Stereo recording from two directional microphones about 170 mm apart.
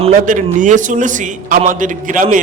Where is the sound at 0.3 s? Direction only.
50° right (ahead or behind).